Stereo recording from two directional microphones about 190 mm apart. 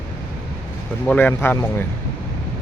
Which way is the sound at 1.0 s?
10° left (ahead or behind).